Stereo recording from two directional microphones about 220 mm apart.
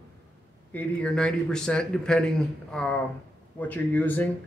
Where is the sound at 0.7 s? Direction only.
5° left (ahead or behind).